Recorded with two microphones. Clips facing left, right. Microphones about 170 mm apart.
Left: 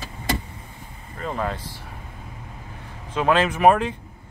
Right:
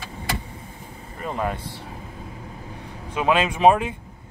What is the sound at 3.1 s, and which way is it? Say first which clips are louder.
Speech: left 1 dB; 15° right (ahead or behind).